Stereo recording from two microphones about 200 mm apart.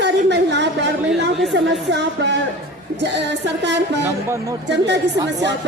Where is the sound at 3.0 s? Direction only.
60° right (ahead or behind).